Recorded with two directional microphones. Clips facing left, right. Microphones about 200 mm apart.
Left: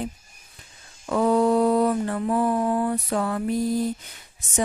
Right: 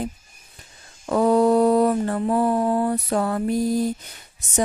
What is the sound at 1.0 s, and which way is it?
Mantra, 35° right (ahead or behind).